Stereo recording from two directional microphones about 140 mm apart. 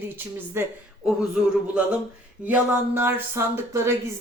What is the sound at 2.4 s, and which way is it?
Speech, 10° right (ahead or behind).